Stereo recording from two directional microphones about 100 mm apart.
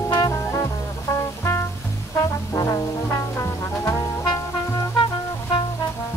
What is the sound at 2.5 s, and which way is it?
Brass instrument, 30° left (ahead or behind).